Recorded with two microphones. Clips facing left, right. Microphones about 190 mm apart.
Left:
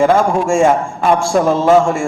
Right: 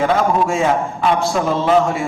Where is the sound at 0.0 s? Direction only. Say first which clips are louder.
Left 4 dB; 45° left (ahead or behind).